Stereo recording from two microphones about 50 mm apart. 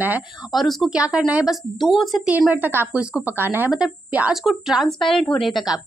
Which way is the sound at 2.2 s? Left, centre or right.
Right.